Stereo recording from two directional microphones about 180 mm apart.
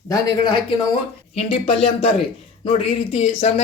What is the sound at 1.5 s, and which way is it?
Speech, 35° left (ahead or behind).